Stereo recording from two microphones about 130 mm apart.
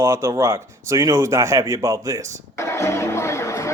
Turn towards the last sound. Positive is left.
turn(degrees=20)  # may be behind; listen again after turning